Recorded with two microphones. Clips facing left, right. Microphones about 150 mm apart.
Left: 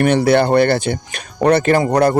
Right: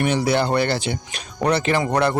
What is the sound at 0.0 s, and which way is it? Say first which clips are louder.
Speech: left 7 dB; 60° left (ahead or behind).